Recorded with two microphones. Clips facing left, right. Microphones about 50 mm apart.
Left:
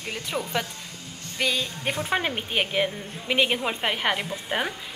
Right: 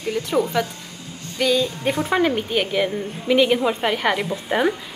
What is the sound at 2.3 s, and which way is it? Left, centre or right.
A woman's voice, centre.